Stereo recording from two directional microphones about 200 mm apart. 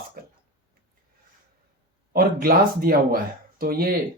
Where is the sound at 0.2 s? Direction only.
50° right (ahead or behind).